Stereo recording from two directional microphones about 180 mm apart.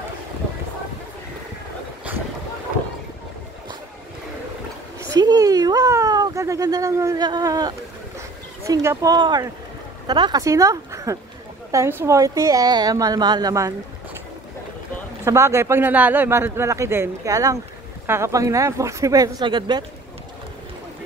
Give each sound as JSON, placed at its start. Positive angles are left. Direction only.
{"t": 5.1, "sound": "a sound", "side_deg": -20}
{"t": 8.6, "sound": "a woman's voice", "side_deg": -20}
{"t": 15.2, "sound": "a man's voice", "side_deg": -15}